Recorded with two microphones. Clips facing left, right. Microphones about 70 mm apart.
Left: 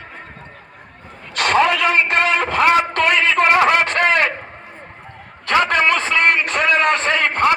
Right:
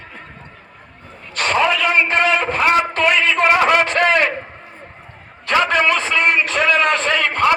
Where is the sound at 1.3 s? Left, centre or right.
Left.